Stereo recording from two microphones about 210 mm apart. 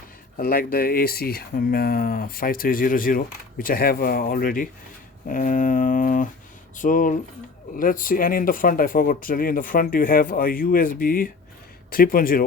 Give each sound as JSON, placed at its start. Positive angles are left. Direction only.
{"t": 0.3, "sound": "speech", "side_deg": 45}
{"t": 5.3, "sound": "mantra", "side_deg": 40}
{"t": 7.8, "sound": "speech", "side_deg": 40}